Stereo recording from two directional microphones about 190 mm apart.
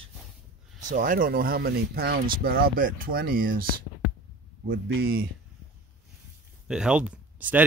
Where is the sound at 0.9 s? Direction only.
45° right (ahead or behind).